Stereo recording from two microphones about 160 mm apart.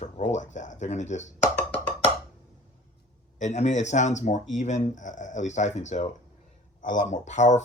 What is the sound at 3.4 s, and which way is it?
Speech, 45° left (ahead or behind).